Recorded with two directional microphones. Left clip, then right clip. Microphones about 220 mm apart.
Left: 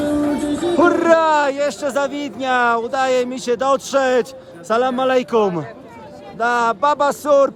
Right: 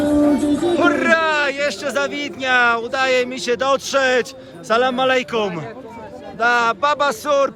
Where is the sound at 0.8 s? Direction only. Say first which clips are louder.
Left 4 dB; 20° left (ahead or behind).